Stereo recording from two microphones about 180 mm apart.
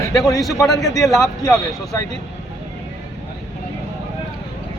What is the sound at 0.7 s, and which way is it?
Speech, 20° left (ahead or behind).